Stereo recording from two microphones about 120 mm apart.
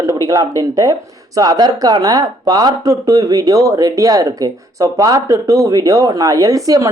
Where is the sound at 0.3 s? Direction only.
30° right (ahead or behind).